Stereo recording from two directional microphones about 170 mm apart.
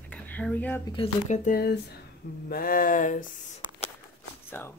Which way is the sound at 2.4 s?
60° left (ahead or behind).